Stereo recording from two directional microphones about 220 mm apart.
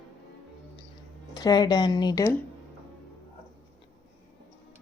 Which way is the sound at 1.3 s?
20° left (ahead or behind).